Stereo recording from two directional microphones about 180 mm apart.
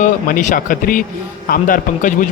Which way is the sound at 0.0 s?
45° left (ahead or behind).